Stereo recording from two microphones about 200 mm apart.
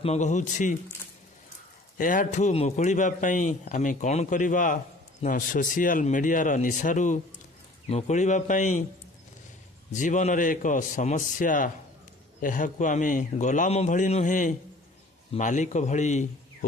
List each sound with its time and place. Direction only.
0.0 s a man's voice: 35° left (ahead or behind)
2.0 s a man's voice: 40° left (ahead or behind)
9.9 s a man's voice: 40° left (ahead or behind)